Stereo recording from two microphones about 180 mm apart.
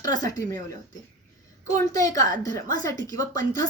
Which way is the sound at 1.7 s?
20° left (ahead or behind).